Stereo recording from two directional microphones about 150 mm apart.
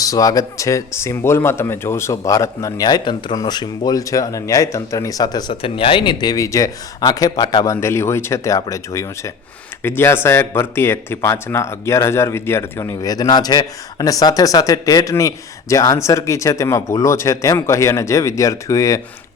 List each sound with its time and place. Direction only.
0.0 s speech: 25° left (ahead or behind)